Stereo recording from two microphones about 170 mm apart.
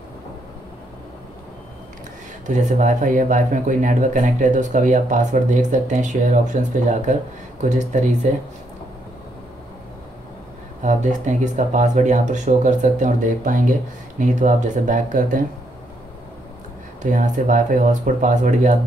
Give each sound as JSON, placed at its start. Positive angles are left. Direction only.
{"t": 2.4, "sound": "speech", "side_deg": -45}
{"t": 10.8, "sound": "speech", "side_deg": -45}
{"t": 17.0, "sound": "speech", "side_deg": -50}